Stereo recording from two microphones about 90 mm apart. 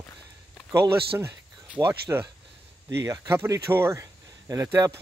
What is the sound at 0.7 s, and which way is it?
Speech, 30° right (ahead or behind).